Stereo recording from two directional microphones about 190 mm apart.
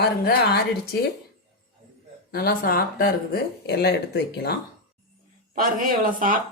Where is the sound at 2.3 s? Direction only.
50° left (ahead or behind).